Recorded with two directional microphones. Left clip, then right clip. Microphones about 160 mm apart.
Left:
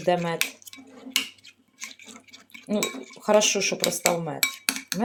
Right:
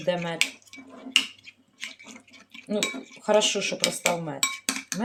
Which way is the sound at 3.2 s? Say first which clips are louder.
Left 2 dB; 35° left (ahead or behind).